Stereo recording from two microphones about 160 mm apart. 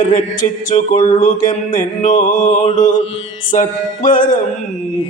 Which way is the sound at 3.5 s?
55° left (ahead or behind).